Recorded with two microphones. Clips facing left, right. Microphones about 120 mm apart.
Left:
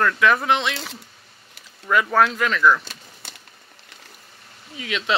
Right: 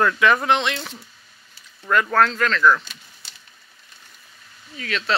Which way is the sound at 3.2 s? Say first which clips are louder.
Left 7 dB; 55° left (ahead or behind).